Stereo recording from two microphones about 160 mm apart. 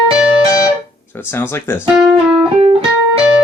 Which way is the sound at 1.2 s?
15° left (ahead or behind).